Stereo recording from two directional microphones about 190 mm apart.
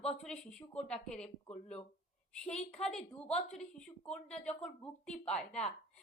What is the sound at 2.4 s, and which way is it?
A woman's voice, 5° left (ahead or behind).